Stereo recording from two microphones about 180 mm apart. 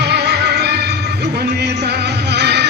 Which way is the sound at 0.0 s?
65° right (ahead or behind).